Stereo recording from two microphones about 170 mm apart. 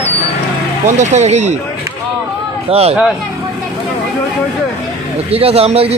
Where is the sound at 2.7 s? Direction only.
35° right (ahead or behind).